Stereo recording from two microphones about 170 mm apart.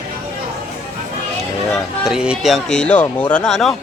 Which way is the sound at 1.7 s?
5° right (ahead or behind).